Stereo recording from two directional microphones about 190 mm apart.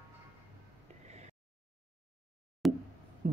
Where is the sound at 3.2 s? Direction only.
40° right (ahead or behind).